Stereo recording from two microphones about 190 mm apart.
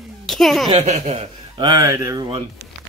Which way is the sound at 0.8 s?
35° right (ahead or behind).